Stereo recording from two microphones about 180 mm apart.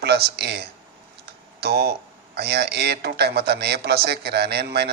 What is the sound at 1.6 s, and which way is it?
Speech, 65° right (ahead or behind).